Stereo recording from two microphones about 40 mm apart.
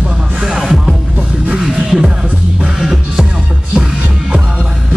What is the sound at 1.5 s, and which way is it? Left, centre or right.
Music, centre.